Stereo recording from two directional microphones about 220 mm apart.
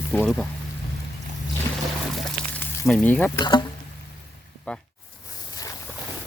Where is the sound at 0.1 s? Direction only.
5° left (ahead or behind).